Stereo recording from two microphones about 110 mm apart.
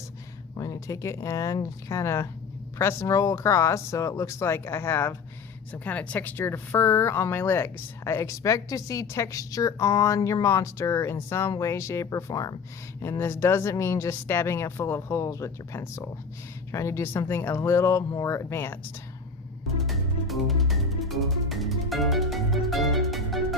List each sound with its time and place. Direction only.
0.5 s a woman's voice: 30° left (ahead or behind)
13.0 s a woman's voice: 25° left (ahead or behind)
19.8 s music: centre (ahead or behind)